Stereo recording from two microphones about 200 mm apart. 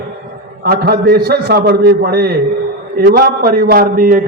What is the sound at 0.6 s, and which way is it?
A man's voice, 50° right (ahead or behind).